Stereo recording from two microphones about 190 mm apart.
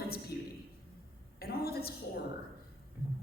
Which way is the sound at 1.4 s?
55° left (ahead or behind).